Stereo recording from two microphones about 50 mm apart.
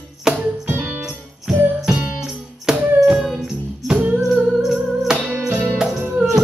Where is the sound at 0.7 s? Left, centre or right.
Right.